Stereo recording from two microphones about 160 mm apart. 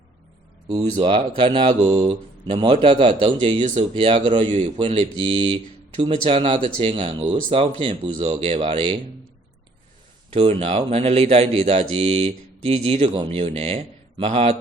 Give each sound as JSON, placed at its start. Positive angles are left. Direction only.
{"t": 0.7, "sound": "speech", "side_deg": -30}
{"t": 8.1, "sound": "speech", "side_deg": -50}
{"t": 8.4, "sound": "speech", "side_deg": -35}
{"t": 10.2, "sound": "speech", "side_deg": -40}